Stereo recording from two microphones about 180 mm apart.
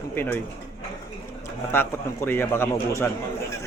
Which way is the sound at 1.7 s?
10° left (ahead or behind).